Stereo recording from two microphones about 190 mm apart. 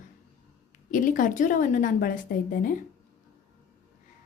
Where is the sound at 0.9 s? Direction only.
45° left (ahead or behind).